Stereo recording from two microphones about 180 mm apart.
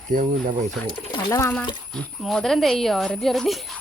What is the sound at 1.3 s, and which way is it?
Speech, 15° left (ahead or behind).